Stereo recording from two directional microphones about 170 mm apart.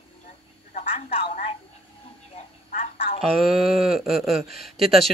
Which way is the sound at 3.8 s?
Centre (ahead or behind).